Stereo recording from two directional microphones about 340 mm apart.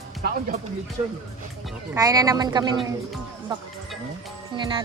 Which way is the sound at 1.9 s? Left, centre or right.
Centre.